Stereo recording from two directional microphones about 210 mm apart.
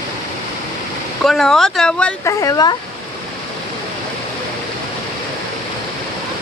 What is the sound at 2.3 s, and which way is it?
Speech, 15° left (ahead or behind).